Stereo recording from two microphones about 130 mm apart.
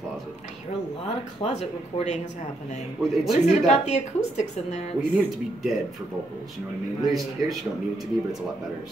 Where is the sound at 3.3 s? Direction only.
60° left (ahead or behind).